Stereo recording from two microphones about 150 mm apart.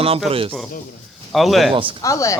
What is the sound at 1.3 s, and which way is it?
Speech, centre (ahead or behind).